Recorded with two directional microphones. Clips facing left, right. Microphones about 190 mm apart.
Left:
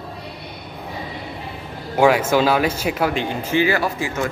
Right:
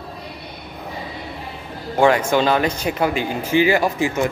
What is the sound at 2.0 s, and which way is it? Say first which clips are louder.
A man's voice: even; 5° left (ahead or behind).